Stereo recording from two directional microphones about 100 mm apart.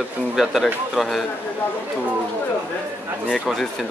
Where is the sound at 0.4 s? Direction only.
Centre (ahead or behind).